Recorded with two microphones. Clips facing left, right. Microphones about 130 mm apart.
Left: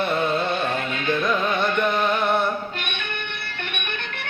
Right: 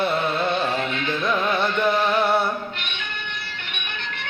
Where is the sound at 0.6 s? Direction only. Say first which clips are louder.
Even; 50° left (ahead or behind).